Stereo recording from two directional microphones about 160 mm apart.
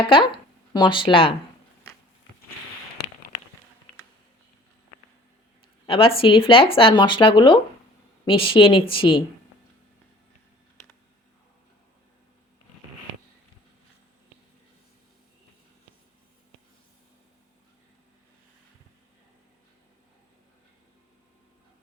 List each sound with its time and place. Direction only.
0.7 s speech: 30° left (ahead or behind)
5.8 s speech: 35° left (ahead or behind)